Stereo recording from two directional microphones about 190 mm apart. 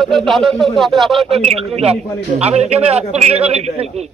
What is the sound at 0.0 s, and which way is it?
Speech, centre (ahead or behind).